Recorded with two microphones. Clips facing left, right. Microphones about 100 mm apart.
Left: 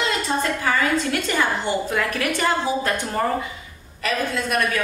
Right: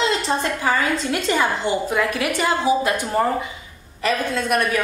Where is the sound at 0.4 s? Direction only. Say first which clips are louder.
Right 1 dB; 25° right (ahead or behind).